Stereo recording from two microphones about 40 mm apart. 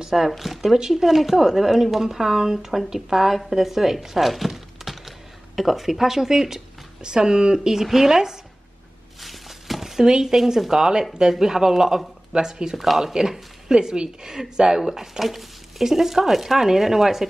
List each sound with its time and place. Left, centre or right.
0.0 s speech: centre
4.5 s thunk: centre
5.6 s speech: centre
9.2 s a sound: centre
11.1 s speech: centre
12.7 s speech: centre
13.0 s speech: centre